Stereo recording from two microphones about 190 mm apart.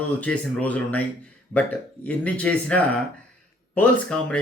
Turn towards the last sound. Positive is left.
turn(degrees=5)  # may be behind; listen again after turning